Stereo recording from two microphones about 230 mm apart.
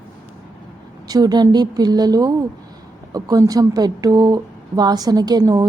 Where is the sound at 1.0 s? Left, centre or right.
Centre.